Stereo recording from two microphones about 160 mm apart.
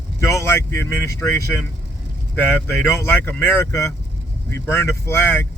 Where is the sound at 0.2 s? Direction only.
15° left (ahead or behind).